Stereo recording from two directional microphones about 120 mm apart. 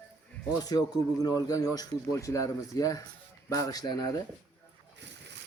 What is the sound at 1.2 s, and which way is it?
A man's voice, 30° left (ahead or behind).